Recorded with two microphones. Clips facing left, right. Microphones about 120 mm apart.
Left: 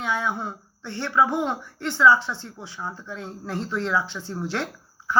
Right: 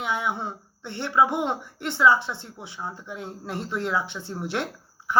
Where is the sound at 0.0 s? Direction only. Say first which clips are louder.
Left 1 dB; 20° right (ahead or behind).